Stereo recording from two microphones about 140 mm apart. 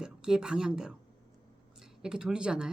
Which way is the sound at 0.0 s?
5° right (ahead or behind).